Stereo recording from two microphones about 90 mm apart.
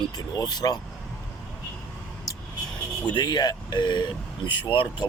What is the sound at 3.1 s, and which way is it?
Speech, 55° left (ahead or behind).